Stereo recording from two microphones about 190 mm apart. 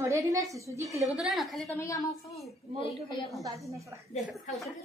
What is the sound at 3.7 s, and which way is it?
Speech, 15° right (ahead or behind).